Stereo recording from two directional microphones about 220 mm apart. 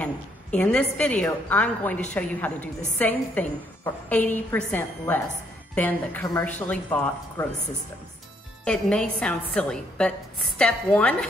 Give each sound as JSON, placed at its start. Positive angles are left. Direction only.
{"t": 0.0, "sound": "a woman's voice", "side_deg": 5}
{"t": 8.6, "sound": "a woman's voice", "side_deg": 5}